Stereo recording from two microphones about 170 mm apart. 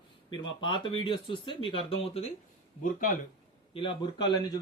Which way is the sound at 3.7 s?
30° left (ahead or behind).